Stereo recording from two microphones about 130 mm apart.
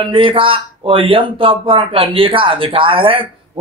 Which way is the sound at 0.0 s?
40° right (ahead or behind).